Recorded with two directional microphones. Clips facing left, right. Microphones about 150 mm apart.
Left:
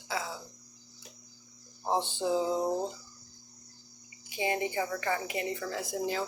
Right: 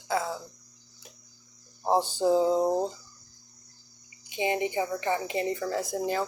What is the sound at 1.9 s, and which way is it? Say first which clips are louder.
Speech: right 6 dB; 40° right (ahead or behind).